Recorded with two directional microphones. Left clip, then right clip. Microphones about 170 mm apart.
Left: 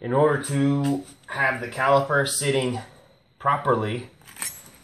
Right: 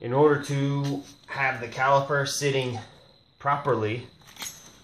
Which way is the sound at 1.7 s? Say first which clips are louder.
Left 2 dB; 25° right (ahead or behind).